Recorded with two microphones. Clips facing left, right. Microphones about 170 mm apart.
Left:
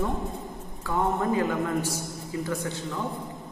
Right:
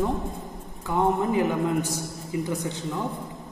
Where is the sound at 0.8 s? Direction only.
15° right (ahead or behind).